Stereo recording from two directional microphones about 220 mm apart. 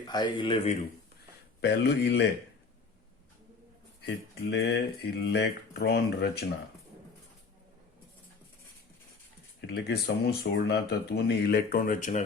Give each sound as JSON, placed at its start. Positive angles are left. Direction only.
{"t": 0.0, "sound": "a man's voice", "side_deg": 20}
{"t": 1.6, "sound": "speech", "side_deg": 50}
{"t": 4.0, "sound": "speech", "side_deg": 50}
{"t": 9.6, "sound": "speech", "side_deg": 50}